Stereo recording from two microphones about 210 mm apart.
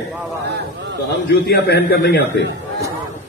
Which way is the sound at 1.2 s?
50° left (ahead or behind).